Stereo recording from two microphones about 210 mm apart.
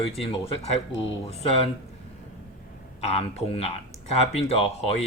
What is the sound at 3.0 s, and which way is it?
Speech, 30° left (ahead or behind).